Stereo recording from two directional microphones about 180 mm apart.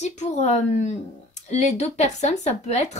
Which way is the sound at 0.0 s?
40° left (ahead or behind).